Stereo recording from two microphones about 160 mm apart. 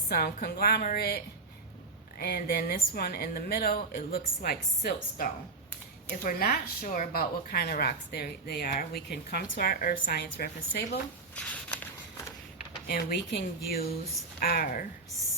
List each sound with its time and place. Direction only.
0.1 s a woman's voice: 75° left (ahead or behind)
11.3 s a sound: 10° left (ahead or behind)
12.9 s a woman's voice: 85° left; by 14.8 s 60° left (ahead or behind)